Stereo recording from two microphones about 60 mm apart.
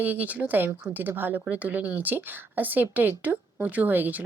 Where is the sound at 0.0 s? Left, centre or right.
Right.